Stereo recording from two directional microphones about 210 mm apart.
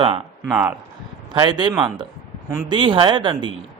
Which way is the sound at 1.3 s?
20° right (ahead or behind).